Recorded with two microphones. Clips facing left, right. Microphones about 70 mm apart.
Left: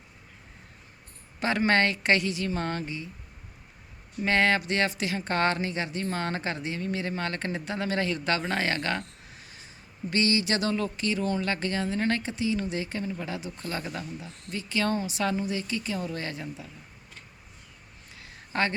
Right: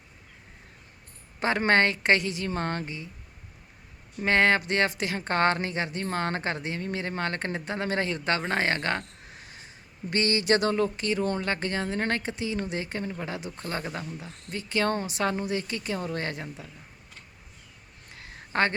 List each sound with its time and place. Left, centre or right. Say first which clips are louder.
1.4 s speech: right 1 dB; right
4.2 s speech: right 2 dB; right
18.1 s a sound: right 2 dB; right